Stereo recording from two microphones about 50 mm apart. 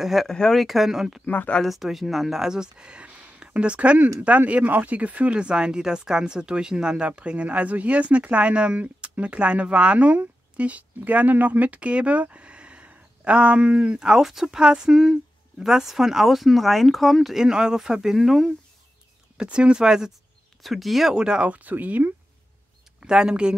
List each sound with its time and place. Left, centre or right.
0.0 s speech: centre
0.3 s speech: centre
0.6 s speech: centre
1.2 s speech: left
1.6 s speech: centre; by 14.0 s right
14.0 s speech: centre
19.3 s speech: right
20.6 s speech: centre
21.1 s speech: centre; by 22.1 s right
23.0 s speech: centre